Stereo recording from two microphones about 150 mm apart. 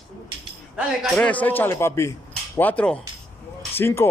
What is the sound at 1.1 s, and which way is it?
Speech, 10° left (ahead or behind).